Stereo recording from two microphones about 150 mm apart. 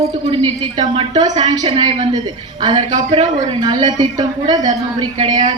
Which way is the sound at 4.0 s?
25° right (ahead or behind).